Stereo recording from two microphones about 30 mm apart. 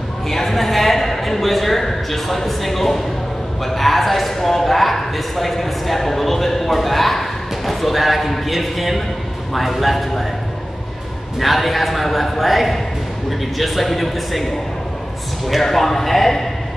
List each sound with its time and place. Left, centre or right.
0.3 s speech: centre
11.3 s speech: centre
15.6 s speech: centre